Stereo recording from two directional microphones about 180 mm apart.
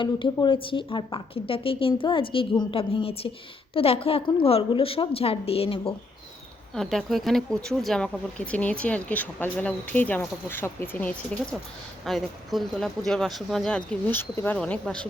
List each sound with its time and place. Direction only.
0.0 s a woman's voice: 25° left (ahead or behind)
6.7 s speech: centre (ahead or behind)